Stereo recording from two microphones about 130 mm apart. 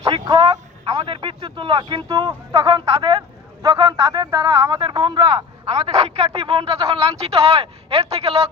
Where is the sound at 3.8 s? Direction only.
30° right (ahead or behind).